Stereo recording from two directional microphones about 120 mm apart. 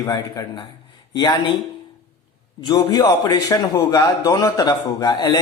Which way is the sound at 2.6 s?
35° left (ahead or behind).